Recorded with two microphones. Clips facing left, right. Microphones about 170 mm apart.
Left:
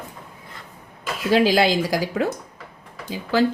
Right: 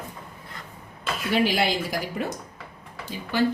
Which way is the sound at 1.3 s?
90° left.